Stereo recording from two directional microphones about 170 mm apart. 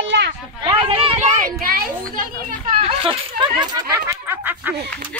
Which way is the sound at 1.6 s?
55° right (ahead or behind).